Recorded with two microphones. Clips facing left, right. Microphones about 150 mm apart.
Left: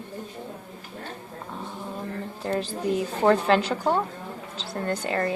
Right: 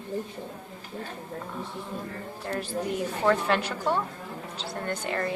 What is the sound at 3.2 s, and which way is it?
Speech, 30° left (ahead or behind).